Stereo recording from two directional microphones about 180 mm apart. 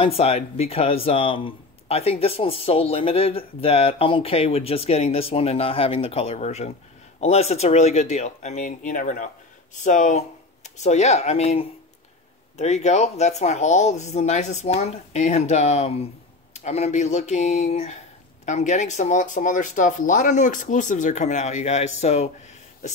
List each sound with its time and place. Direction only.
0.0 s speech: 35° left (ahead or behind)